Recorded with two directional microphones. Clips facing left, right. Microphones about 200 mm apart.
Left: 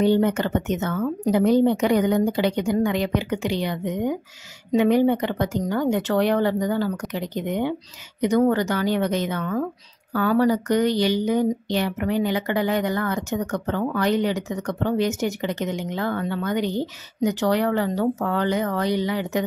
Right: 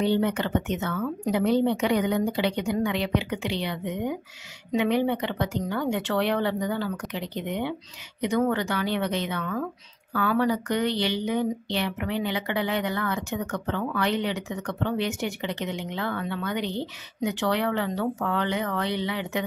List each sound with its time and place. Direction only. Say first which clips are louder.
0.0 s speech: left 5 dB; 45° left (ahead or behind)